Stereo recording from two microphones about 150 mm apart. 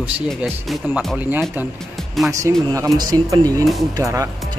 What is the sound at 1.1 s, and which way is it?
Speech, 10° right (ahead or behind).